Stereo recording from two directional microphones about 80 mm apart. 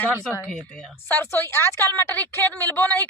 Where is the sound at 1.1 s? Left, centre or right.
Left.